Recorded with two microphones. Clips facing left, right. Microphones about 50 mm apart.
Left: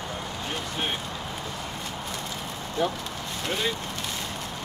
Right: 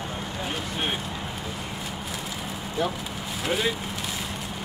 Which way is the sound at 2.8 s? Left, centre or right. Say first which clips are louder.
Left 1 dB; centre.